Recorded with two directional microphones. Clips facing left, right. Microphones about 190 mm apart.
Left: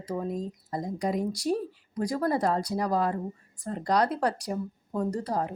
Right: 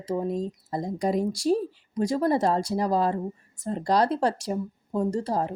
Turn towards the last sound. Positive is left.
turn(degrees=-30)  # may be behind; listen again after turning